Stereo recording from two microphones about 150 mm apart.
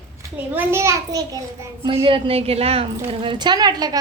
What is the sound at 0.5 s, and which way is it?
Speech, 20° right (ahead or behind).